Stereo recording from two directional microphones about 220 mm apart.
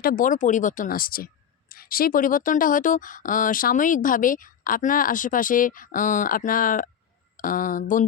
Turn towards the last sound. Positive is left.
turn(degrees=35)  # may be behind; listen again after turning